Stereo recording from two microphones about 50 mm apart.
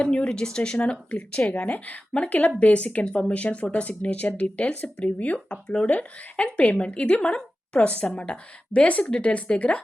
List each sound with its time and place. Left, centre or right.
0.0 s speech: left